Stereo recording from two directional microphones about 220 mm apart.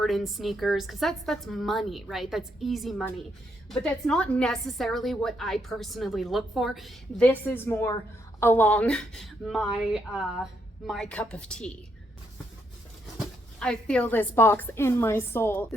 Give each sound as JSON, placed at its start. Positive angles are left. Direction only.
{"t": 0.0, "sound": "a woman's voice", "side_deg": 0}
{"t": 13.1, "sound": "speech", "side_deg": 5}